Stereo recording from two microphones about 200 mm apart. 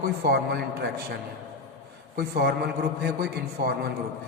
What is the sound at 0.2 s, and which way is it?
Speech, 50° right (ahead or behind).